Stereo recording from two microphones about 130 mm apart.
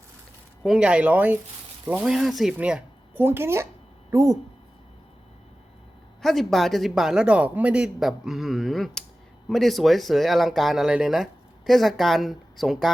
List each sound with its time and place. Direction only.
0.6 s speech: 5° right (ahead or behind); by 4.4 s 25° right (ahead or behind)
6.2 s speech: centre (ahead or behind)